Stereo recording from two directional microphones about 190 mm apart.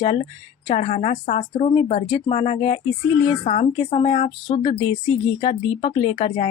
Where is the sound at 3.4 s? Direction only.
40° left (ahead or behind).